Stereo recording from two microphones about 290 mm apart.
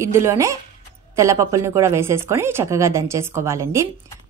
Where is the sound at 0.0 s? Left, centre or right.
Centre.